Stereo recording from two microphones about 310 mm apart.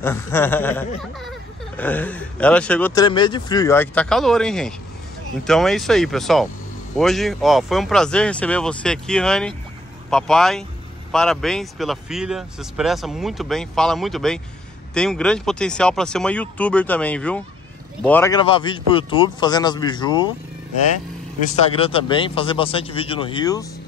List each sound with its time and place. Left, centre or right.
0.0 s a man's voice: centre
21.7 s a man's voice: centre